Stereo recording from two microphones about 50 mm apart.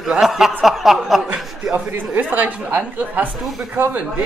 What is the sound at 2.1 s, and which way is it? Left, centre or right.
A woman's voice, right.